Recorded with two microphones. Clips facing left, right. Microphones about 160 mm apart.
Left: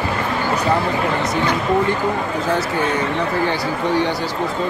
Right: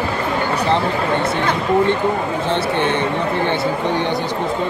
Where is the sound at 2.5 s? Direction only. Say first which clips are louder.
Right 1 dB; 25° right (ahead or behind).